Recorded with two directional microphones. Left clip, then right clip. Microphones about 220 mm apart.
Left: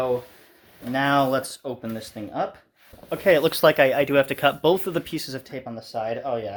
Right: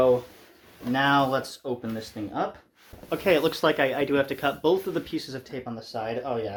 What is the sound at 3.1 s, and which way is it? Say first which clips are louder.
Speech: left 4 dB; 30° left (ahead or behind).